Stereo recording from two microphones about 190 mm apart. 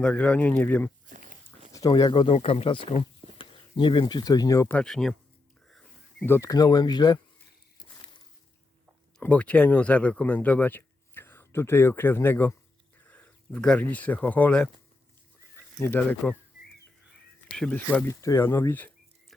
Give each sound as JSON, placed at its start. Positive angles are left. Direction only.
{"t": 0.0, "sound": "speech", "side_deg": 5}
{"t": 1.0, "sound": "a sound", "side_deg": -45}
{"t": 1.7, "sound": "speech", "side_deg": 20}
{"t": 9.1, "sound": "speech", "side_deg": 5}
{"t": 17.5, "sound": "speech", "side_deg": 5}